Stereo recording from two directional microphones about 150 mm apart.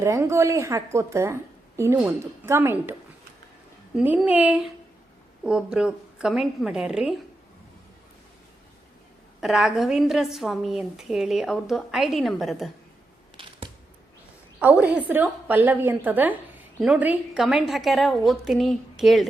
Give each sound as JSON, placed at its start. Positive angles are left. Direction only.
{"t": 0.0, "sound": "a woman's voice", "side_deg": -20}
{"t": 3.9, "sound": "a woman's voice", "side_deg": -10}
{"t": 9.4, "sound": "a woman's voice", "side_deg": 0}
{"t": 13.3, "sound": "typewriter", "side_deg": -35}
{"t": 14.6, "sound": "a woman's voice", "side_deg": -10}